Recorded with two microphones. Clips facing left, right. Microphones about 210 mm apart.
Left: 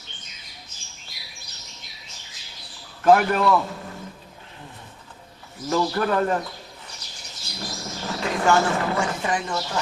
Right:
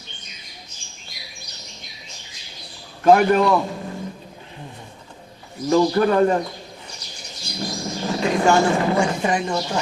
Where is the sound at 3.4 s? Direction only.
15° right (ahead or behind).